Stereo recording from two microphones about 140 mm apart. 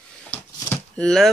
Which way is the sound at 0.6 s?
5° left (ahead or behind).